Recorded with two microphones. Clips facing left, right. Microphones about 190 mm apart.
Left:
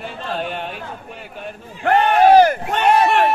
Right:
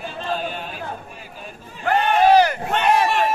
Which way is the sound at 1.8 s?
60° left (ahead or behind).